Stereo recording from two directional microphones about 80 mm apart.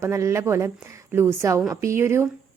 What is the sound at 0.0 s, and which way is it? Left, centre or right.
A woman's voice, right.